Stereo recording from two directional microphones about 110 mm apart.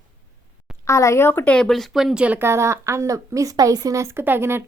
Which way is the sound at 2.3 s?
25° right (ahead or behind).